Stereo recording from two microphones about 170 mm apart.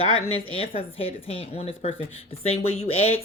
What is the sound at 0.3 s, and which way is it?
A woman's voice, 35° left (ahead or behind).